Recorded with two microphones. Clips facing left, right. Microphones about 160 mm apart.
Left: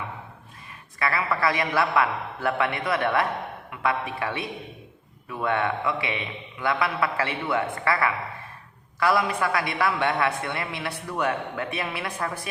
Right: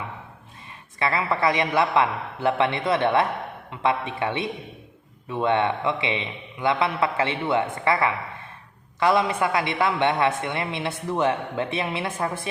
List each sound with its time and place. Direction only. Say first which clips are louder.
0.9 s a woman's voice: right 2 dB; 25° right (ahead or behind)